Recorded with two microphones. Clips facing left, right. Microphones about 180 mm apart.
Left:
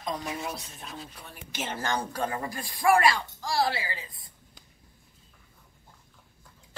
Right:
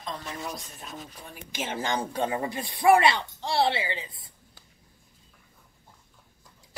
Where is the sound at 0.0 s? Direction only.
10° left (ahead or behind).